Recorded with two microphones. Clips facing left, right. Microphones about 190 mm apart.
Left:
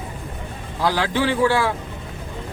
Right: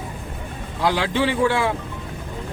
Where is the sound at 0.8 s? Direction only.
25° right (ahead or behind).